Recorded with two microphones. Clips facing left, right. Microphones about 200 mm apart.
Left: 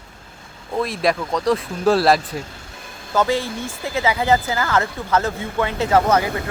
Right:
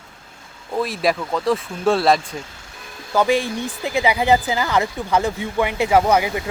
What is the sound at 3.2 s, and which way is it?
Speech, 15° right (ahead or behind).